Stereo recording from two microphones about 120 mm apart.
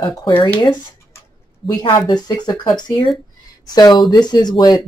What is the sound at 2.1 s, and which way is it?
Speech, 35° left (ahead or behind).